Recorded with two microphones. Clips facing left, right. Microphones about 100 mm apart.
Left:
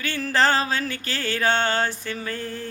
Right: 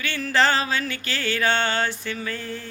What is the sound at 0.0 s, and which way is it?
Music, 40° left (ahead or behind).